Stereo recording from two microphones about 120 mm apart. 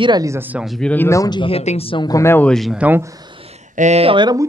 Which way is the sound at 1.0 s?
30° left (ahead or behind).